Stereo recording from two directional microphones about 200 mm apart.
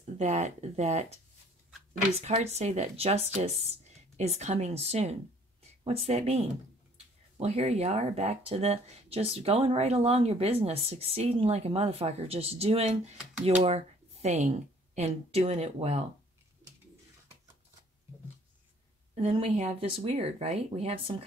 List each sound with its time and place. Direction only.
0.2 s speech: 35° right (ahead or behind)
2.1 s speech: 30° right (ahead or behind)
19.2 s speech: 30° right (ahead or behind)